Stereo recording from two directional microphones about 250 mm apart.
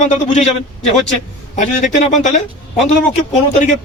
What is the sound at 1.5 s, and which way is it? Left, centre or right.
A man's voice, left.